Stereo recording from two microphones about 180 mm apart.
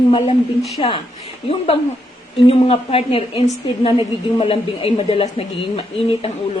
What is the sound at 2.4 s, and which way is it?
A woman's voice, 30° left (ahead or behind).